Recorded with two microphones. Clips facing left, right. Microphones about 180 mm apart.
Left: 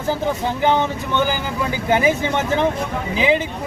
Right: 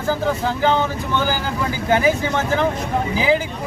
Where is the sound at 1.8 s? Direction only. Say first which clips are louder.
Even; 20° left (ahead or behind).